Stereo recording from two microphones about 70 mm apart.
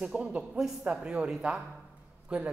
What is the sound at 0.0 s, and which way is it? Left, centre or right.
A man's voice, centre.